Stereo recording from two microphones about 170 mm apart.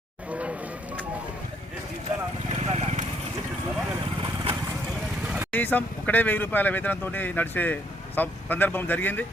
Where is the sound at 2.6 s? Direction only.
40° right (ahead or behind).